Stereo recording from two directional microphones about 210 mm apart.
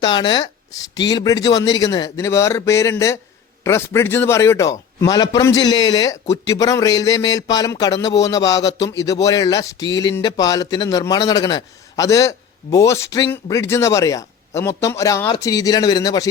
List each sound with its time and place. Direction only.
0.0 s a man's voice: 20° left (ahead or behind)